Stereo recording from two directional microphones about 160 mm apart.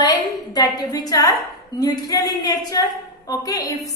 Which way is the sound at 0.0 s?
25° left (ahead or behind).